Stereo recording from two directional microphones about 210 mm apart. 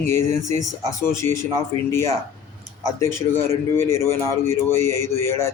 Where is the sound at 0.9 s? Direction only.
15° left (ahead or behind).